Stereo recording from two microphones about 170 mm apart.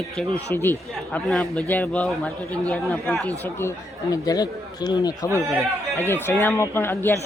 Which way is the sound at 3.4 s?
15° left (ahead or behind).